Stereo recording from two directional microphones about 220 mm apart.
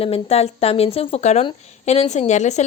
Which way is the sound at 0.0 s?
25° left (ahead or behind).